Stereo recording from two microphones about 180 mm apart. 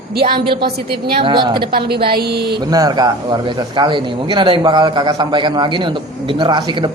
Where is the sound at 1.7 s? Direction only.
60° right (ahead or behind).